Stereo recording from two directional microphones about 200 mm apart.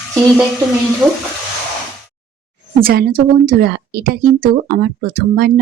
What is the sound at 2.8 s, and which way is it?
Speech, 50° right (ahead or behind).